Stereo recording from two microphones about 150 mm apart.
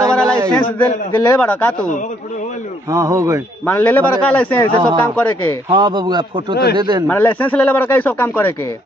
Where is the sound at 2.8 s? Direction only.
20° right (ahead or behind).